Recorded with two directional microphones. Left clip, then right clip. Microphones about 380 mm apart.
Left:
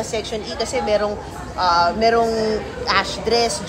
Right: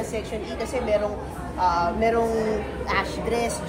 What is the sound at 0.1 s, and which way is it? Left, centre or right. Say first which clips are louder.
A woman's voice: left 5 dB; left.